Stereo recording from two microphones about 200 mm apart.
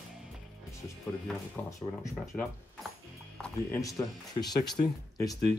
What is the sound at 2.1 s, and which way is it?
Speech, centre (ahead or behind).